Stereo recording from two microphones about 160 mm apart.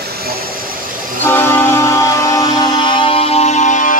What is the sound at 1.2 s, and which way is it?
Music, 15° left (ahead or behind).